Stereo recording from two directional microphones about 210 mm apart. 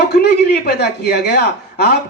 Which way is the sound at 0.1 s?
50° left (ahead or behind).